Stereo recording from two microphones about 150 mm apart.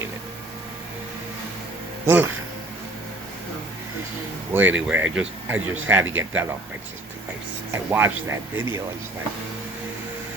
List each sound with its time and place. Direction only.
2.0 s speech: 15° right (ahead or behind)
4.5 s speech: 10° right (ahead or behind)
7.7 s speech: 15° right (ahead or behind)